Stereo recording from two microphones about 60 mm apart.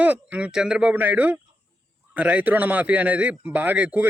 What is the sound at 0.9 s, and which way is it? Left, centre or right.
A man's voice, right.